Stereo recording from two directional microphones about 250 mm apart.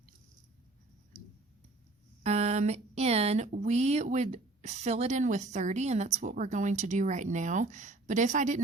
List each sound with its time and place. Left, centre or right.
2.2 s speech: right